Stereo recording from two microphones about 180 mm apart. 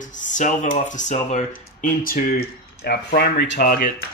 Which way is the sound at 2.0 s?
50° left (ahead or behind).